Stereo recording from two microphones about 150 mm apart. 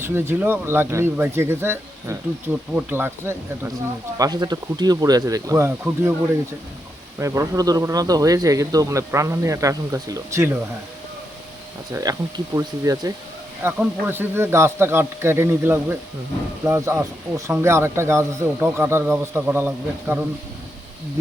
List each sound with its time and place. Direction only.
0.0 s speech: 15° right (ahead or behind)
4.2 s speech: 25° right (ahead or behind)
7.2 s speech: 20° right (ahead or behind)
12.1 s speech: 25° right (ahead or behind)